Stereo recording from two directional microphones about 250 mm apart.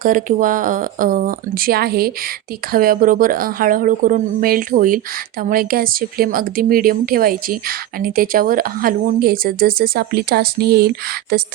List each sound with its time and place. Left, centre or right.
0.0 s speech: right